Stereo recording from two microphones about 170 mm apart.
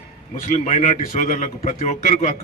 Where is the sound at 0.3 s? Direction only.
45° left (ahead or behind).